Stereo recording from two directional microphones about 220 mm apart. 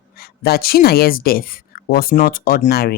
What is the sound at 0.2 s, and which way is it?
Speech, 45° left (ahead or behind).